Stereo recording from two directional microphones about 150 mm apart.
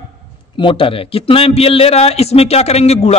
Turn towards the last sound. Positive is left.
turn(degrees=45)  # may be behind; listen again after turning